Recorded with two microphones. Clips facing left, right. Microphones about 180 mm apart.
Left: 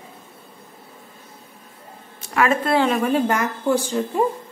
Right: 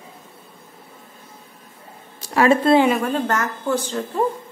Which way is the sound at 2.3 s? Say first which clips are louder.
Right 4 dB; 30° right (ahead or behind).